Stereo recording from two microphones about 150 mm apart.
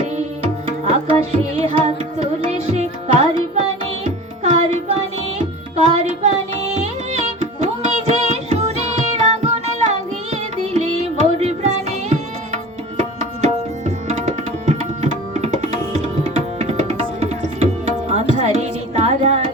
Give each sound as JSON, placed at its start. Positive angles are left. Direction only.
{"t": 0.9, "sound": "tabla", "side_deg": -45}
{"t": 1.6, "sound": "music", "side_deg": -40}
{"t": 13.0, "sound": "tabla", "side_deg": -45}
{"t": 18.9, "sound": "music", "side_deg": -45}